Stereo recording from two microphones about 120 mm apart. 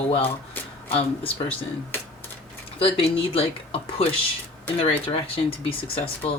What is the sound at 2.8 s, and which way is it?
Speech, 55° left (ahead or behind).